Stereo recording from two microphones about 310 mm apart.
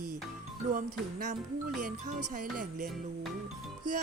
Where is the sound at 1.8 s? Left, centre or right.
Right.